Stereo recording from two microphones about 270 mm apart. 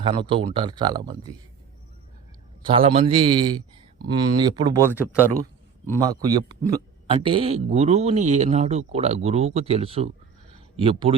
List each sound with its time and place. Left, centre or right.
0.0 s speech: centre
2.6 s a man's voice: right